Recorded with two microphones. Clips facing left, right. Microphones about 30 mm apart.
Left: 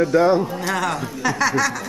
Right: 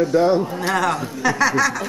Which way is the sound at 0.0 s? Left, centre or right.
Centre.